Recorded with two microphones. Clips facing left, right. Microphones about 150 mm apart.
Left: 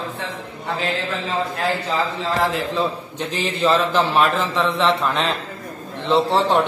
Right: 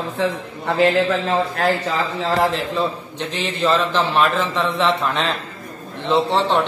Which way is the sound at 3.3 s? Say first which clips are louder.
Even; centre (ahead or behind).